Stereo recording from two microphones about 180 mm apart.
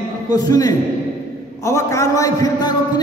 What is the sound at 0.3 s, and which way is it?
A man's voice, 20° left (ahead or behind).